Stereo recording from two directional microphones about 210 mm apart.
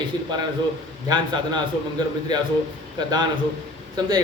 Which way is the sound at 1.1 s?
20° right (ahead or behind).